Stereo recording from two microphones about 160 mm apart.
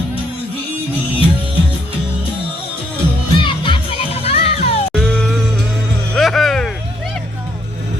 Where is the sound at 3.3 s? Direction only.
30° left (ahead or behind).